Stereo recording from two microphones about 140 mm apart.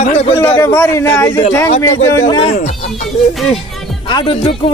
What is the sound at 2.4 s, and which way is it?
Speech, 55° left (ahead or behind).